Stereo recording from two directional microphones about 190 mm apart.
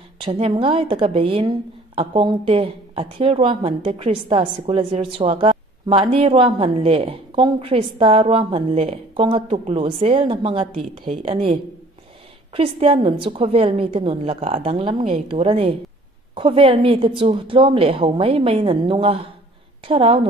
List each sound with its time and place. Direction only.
0.2 s a woman's voice: 25° right (ahead or behind)
12.5 s a woman's voice: 30° right (ahead or behind)